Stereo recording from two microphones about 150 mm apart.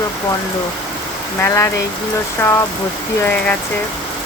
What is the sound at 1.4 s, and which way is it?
Speech, 20° left (ahead or behind).